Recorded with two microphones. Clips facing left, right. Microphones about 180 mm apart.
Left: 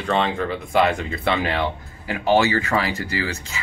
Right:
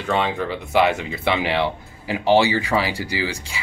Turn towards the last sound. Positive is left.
turn(degrees=-10)  # may be behind; listen again after turning